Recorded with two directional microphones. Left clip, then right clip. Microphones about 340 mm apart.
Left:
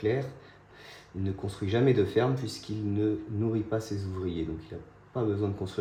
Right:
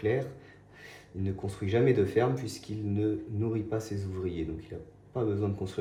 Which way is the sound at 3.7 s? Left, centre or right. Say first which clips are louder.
Left 2 dB; centre.